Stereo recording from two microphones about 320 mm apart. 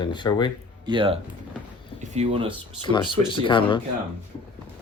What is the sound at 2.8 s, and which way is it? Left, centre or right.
Speech, centre.